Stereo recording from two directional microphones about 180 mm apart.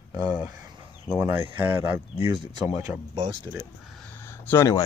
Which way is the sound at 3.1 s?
25° right (ahead or behind).